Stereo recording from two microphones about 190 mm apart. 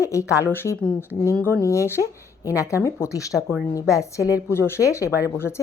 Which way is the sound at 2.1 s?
15° left (ahead or behind).